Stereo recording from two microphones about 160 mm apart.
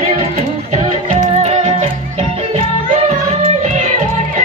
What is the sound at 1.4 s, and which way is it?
Yodeling, 40° right (ahead or behind).